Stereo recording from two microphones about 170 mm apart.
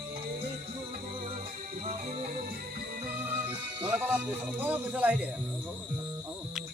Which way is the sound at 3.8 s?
10° right (ahead or behind).